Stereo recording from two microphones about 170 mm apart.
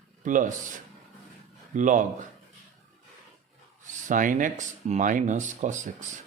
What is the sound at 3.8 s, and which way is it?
Speech, 50° right (ahead or behind).